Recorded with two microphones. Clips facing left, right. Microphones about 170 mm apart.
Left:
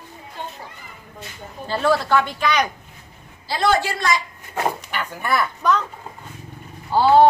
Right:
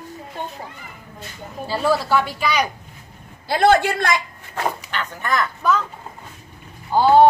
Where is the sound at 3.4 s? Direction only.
55° right (ahead or behind).